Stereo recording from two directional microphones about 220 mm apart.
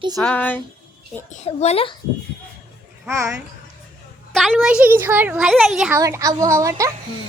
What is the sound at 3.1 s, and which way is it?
Speech, 10° right (ahead or behind).